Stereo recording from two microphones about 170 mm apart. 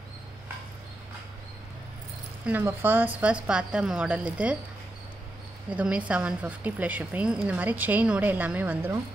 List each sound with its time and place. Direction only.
2.4 s a woman's voice: 10° right (ahead or behind)
5.7 s a woman's voice: 5° right (ahead or behind)